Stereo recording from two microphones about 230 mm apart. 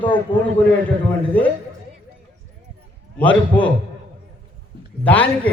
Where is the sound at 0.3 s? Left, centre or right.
Centre.